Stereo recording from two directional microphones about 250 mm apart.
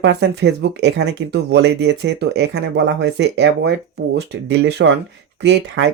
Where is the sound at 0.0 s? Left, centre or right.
Right.